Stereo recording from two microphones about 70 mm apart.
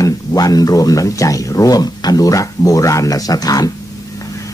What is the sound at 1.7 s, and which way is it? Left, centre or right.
A man's voice, left.